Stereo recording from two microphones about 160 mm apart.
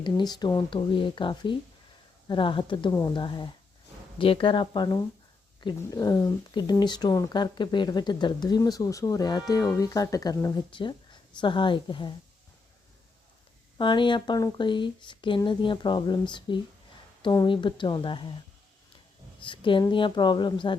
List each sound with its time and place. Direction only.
0.0 s speech: 25° left (ahead or behind)
13.7 s speech: 30° left (ahead or behind)
19.4 s a sound: 30° left (ahead or behind)
19.9 s speech: 30° left (ahead or behind)